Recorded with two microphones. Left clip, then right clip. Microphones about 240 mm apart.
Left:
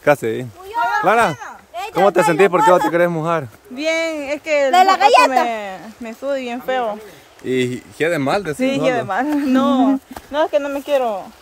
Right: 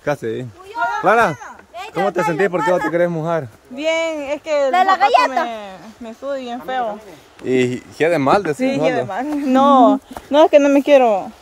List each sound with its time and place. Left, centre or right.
0.0 s speech: centre
4.7 s speech: left
5.5 s speech: centre
7.4 s speech: centre
10.3 s speech: right